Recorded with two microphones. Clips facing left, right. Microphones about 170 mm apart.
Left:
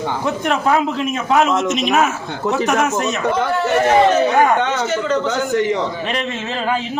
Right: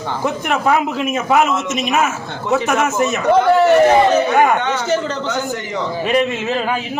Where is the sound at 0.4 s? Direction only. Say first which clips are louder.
Even; 5° right (ahead or behind).